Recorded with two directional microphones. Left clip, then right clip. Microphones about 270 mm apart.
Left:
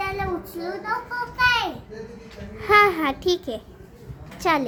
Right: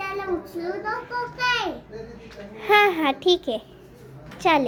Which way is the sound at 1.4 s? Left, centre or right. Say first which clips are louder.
Left 4 dB; left.